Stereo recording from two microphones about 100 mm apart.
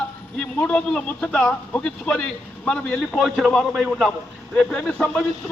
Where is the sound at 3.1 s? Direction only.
5° right (ahead or behind).